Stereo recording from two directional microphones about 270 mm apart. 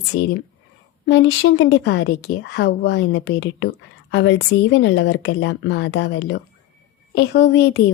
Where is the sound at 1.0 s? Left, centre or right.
Left.